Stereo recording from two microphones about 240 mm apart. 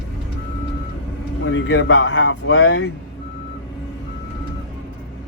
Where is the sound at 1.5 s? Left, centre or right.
Left.